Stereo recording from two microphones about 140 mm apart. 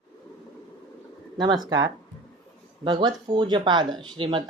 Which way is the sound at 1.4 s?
30° right (ahead or behind).